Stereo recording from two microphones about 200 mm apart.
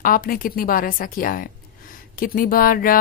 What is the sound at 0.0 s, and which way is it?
Speech, 45° left (ahead or behind).